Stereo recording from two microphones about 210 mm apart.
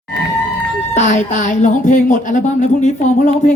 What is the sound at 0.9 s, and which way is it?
Speech, 35° left (ahead or behind).